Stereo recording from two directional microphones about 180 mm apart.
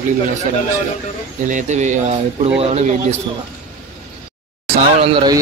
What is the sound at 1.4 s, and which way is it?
Speech, 45° right (ahead or behind).